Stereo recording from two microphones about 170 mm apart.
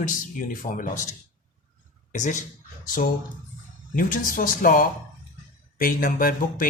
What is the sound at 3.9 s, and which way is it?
Speech, 55° left (ahead or behind).